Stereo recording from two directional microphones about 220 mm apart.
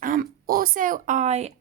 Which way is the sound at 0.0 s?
40° right (ahead or behind).